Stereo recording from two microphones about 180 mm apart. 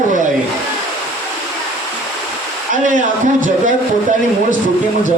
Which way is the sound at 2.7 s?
45° right (ahead or behind).